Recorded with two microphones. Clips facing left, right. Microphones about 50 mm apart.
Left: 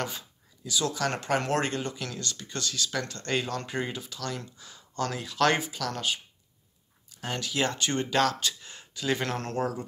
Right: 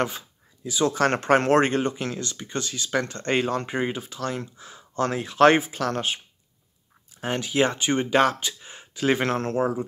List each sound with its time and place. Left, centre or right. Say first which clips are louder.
0.7 s speech: right 7 dB; right
9.0 s speech: right 7 dB; right